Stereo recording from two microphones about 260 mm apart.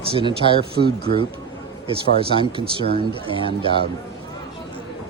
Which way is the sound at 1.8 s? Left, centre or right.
Right.